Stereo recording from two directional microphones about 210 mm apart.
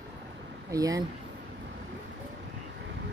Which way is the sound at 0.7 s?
15° right (ahead or behind).